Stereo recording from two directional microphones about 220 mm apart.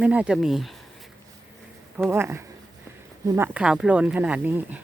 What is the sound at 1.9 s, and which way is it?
Speech, 10° right (ahead or behind).